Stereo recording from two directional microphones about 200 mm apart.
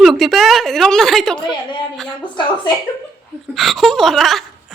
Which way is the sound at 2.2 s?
25° left (ahead or behind).